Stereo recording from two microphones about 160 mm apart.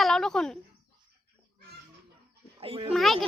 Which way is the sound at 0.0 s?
Centre (ahead or behind).